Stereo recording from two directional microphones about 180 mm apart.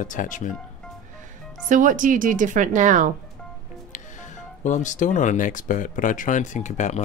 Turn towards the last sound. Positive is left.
turn(degrees=40)  # may be behind; listen again after turning